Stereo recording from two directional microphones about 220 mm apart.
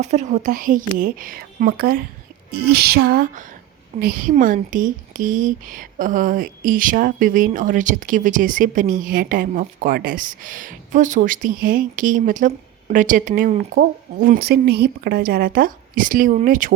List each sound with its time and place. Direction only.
0.0 s speech: 30° right (ahead or behind)
2.5 s music: 45° right (ahead or behind)
4.0 s speech: 40° right (ahead or behind)